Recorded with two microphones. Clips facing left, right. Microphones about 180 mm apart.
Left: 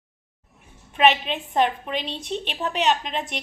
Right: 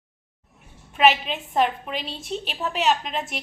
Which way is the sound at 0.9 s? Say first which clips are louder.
Even; centre (ahead or behind).